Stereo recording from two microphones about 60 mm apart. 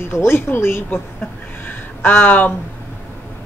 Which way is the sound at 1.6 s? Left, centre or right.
Left.